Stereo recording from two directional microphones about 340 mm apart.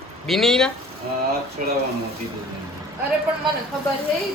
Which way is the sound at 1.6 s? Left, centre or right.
Right.